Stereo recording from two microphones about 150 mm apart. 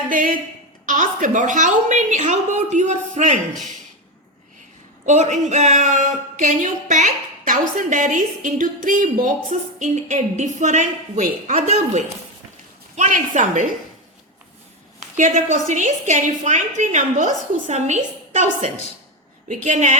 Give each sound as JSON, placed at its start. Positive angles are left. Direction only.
{"t": 0.1, "sound": "a woman's voice", "side_deg": -65}
{"t": 5.0, "sound": "speech", "side_deg": -50}
{"t": 13.0, "sound": "speech", "side_deg": -55}
{"t": 15.1, "sound": "a woman's voice", "side_deg": -60}